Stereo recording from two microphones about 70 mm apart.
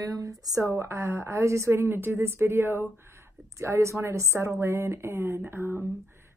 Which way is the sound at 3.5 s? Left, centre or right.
Right.